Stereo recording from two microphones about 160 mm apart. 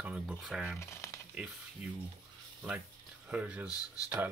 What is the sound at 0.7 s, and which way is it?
Speech, 15° left (ahead or behind).